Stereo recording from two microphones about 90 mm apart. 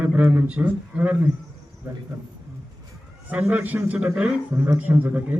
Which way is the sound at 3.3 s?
15° right (ahead or behind).